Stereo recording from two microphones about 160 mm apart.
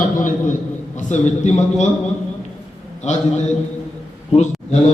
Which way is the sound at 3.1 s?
45° left (ahead or behind).